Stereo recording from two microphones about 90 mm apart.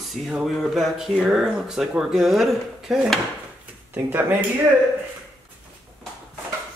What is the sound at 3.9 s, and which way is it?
Speech, 20° right (ahead or behind).